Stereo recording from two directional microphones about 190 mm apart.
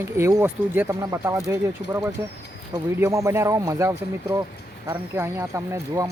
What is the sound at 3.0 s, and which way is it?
Speech, 15° right (ahead or behind).